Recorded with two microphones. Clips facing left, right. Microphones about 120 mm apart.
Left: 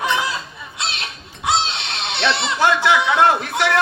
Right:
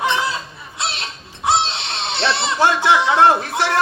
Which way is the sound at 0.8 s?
30° right (ahead or behind).